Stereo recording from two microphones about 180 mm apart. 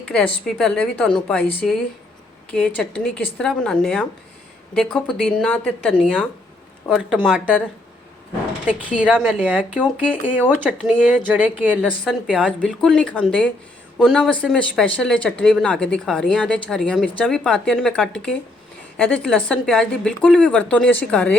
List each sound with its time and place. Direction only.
0.0 s a sound: 5° left (ahead or behind)
0.4 s speech: 5° left (ahead or behind)
2.5 s speech: 5° left (ahead or behind)
6.8 s speech: 5° right (ahead or behind)
8.6 s a woman's voice: 5° right (ahead or behind)